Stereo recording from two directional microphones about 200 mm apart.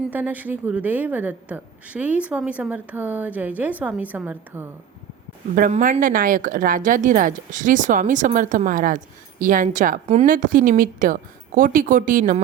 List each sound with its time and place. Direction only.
0.1 s a woman's voice: 10° right (ahead or behind)
5.5 s a woman's voice: 40° right (ahead or behind)